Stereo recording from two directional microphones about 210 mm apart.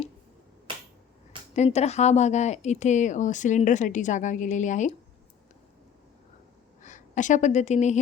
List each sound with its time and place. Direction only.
1.5 s speech: 30° left (ahead or behind)
6.8 s a woman's voice: 35° left (ahead or behind)